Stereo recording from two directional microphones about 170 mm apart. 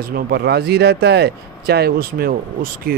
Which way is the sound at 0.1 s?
70° right (ahead or behind).